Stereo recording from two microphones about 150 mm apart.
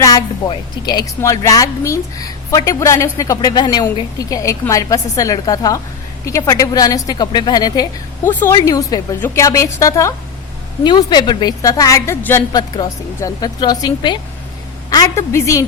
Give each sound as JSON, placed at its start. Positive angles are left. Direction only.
{"t": 0.0, "sound": "a woman's voice", "side_deg": 25}
{"t": 8.2, "sound": "a woman's voice", "side_deg": 15}
{"t": 8.5, "sound": "a woman's voice", "side_deg": 25}